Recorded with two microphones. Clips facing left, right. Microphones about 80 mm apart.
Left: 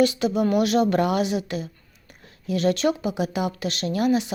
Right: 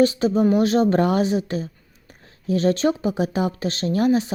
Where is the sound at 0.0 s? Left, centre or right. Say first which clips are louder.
Right 3 dB; right.